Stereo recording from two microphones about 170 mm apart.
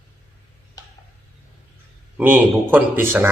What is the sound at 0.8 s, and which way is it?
Tick-tock, 20° left (ahead or behind).